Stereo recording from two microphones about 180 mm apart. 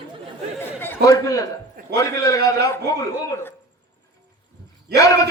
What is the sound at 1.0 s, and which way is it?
A man's voice, 20° left (ahead or behind).